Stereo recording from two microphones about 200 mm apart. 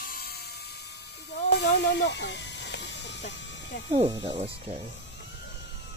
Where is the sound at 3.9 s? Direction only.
25° right (ahead or behind).